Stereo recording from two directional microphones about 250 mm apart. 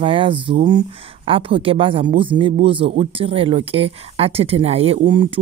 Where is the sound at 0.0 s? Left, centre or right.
Centre.